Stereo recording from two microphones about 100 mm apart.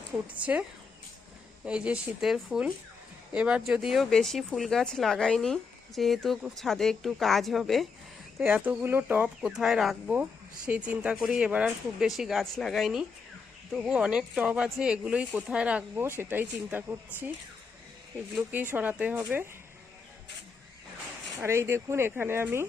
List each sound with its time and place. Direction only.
0.3 s speech: 15° right (ahead or behind)
1.6 s speech: 10° right (ahead or behind)
8.4 s speech: 15° right (ahead or behind)
9.4 s speech: 5° right (ahead or behind)
10.7 s speech: 15° right (ahead or behind)
16.0 s speech: 20° right (ahead or behind)
18.5 s speech: 20° right (ahead or behind)
21.4 s speech: 25° right (ahead or behind)